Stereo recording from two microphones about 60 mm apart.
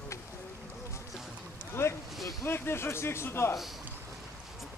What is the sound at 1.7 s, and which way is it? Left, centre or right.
Boat, left.